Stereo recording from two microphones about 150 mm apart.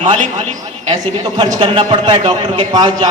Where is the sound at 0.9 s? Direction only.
30° right (ahead or behind).